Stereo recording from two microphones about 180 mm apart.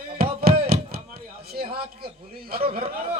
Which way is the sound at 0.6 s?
60° right (ahead or behind).